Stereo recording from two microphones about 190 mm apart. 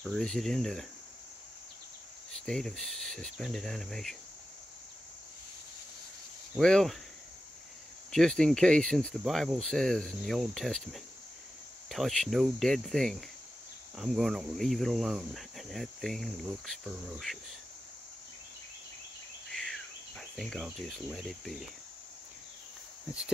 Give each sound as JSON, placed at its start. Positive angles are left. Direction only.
{"t": 0.0, "sound": "speech", "side_deg": 0}
{"t": 2.3, "sound": "speech", "side_deg": 5}
{"t": 6.6, "sound": "speech", "side_deg": 5}
{"t": 8.1, "sound": "speech", "side_deg": 5}
{"t": 19.5, "sound": "cricket", "side_deg": 0}